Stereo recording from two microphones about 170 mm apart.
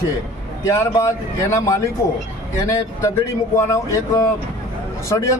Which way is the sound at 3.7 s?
20° left (ahead or behind).